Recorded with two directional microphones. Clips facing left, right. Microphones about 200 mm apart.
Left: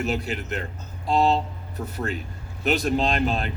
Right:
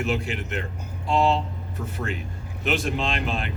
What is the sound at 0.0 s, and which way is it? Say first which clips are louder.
Speech: even; 40° left (ahead or behind).